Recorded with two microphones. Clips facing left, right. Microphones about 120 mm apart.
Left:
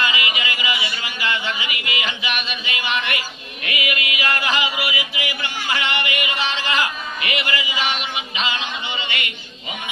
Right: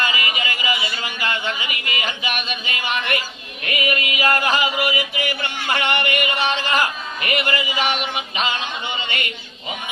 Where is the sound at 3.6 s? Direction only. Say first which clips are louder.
Right 3 dB; 40° right (ahead or behind).